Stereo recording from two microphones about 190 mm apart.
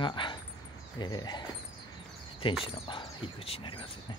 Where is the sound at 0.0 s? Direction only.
25° left (ahead or behind).